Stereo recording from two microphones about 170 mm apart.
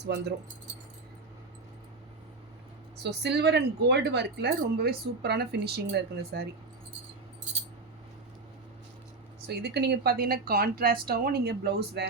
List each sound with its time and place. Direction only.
0.0 s a woman's voice: 80° right
3.0 s a woman's voice: 80° right
4.6 s speech: 70° right (ahead or behind)
9.5 s speech: 75° right (ahead or behind)